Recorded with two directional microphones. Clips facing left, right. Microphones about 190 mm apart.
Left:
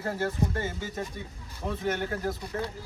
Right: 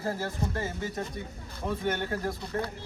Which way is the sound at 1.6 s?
Centre (ahead or behind).